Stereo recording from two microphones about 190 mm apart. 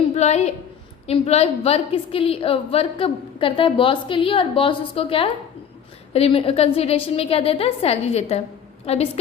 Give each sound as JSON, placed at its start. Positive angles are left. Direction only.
{"t": 0.2, "sound": "a woman's voice", "side_deg": 35}